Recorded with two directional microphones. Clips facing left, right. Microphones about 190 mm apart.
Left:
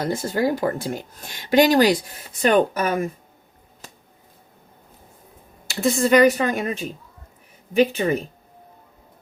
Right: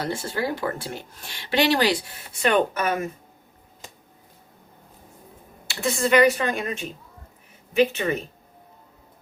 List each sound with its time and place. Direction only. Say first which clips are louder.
0.0 s speech: left 5 dB; 40° left (ahead or behind)
5.6 s speech: left 4 dB; 40° left (ahead or behind)